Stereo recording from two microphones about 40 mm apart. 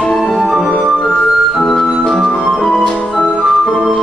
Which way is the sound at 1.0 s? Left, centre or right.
Centre.